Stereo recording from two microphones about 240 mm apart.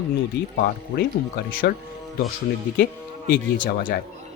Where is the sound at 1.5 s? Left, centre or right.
Left.